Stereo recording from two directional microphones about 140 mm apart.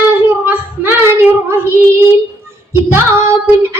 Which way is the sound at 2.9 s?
20° right (ahead or behind).